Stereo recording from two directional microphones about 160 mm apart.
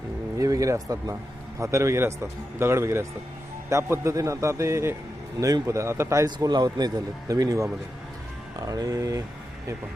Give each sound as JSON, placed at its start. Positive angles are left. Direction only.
{"t": 0.3, "sound": "a man's voice", "side_deg": -20}